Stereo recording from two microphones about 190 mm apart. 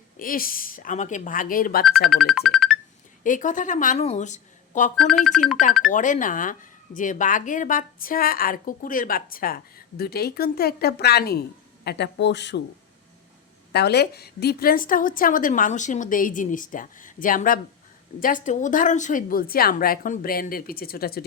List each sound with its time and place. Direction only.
0.2 s speech: 50° left (ahead or behind)
2.0 s speech: centre (ahead or behind)
3.2 s speech: 45° left (ahead or behind)
4.9 s speech: centre (ahead or behind)
5.9 s speech: 40° left (ahead or behind)
11.9 s speech: 65° left (ahead or behind)
13.7 s speech: 60° left (ahead or behind)